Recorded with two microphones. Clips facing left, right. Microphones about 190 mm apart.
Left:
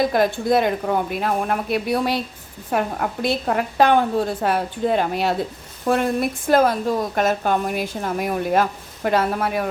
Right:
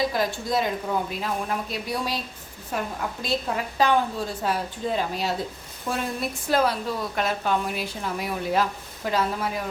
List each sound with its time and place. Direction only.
0.1 s a woman's voice: 55° left (ahead or behind)